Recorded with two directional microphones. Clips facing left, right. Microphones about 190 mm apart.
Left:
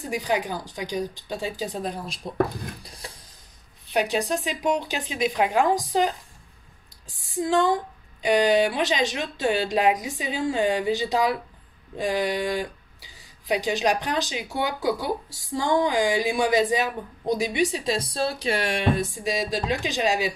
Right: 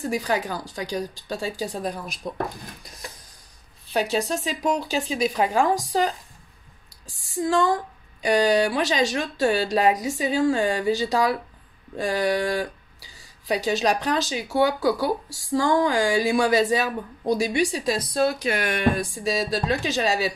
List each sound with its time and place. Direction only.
0.1 s speech: 15° left (ahead or behind)
2.8 s a sound: 30° left (ahead or behind)
3.9 s speech: 15° left (ahead or behind)
7.2 s speech: 20° left (ahead or behind)